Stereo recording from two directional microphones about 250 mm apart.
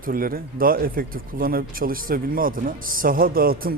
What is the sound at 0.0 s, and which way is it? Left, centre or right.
A man's voice, right.